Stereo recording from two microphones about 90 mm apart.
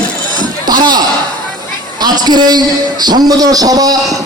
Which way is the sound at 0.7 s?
50° right (ahead or behind).